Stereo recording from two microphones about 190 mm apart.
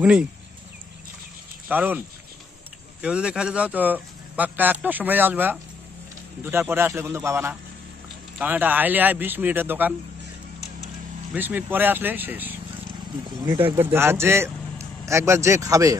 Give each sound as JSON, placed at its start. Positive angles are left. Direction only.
{"t": 0.0, "sound": "speech", "side_deg": -5}
{"t": 1.7, "sound": "speech", "side_deg": -10}
{"t": 11.3, "sound": "speech", "side_deg": -10}
{"t": 13.5, "sound": "speech", "side_deg": -30}
{"t": 13.9, "sound": "speech", "side_deg": -10}